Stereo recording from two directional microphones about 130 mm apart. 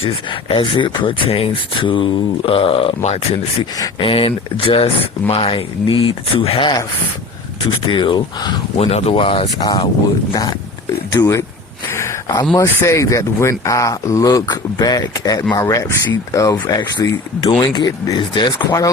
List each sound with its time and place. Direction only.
0.0 s speech: 40° left (ahead or behind)
3.6 s speech: 40° left (ahead or behind)
7.9 s speech: 40° left (ahead or behind)
8.8 s speech: 55° left (ahead or behind)
9.6 s speech: 30° left (ahead or behind)
11.1 s speech: 25° left (ahead or behind)
11.9 s a sound: 20° left (ahead or behind)
12.5 s speech: 25° left (ahead or behind)